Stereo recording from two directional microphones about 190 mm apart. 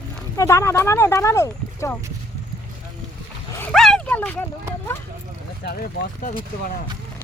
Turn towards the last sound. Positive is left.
turn(degrees=45)  # may be behind; listen again after turning